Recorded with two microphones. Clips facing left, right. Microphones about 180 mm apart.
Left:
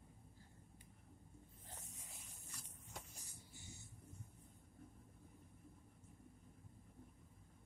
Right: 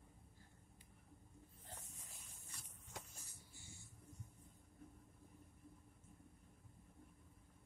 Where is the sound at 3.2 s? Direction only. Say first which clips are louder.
Left 2 dB; 20° left (ahead or behind).